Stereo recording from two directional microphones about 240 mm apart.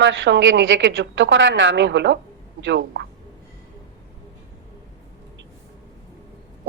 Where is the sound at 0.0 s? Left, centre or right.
Right.